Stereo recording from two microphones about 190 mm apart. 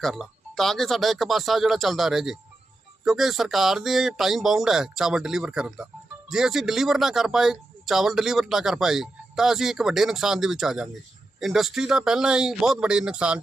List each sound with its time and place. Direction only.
0.0 s speech: centre (ahead or behind)